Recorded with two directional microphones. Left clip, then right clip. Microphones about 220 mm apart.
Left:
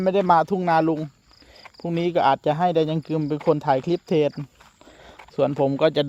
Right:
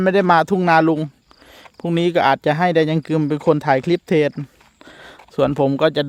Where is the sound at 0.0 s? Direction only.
35° right (ahead or behind).